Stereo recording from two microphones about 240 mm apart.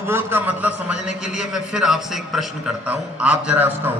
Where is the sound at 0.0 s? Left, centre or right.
Centre.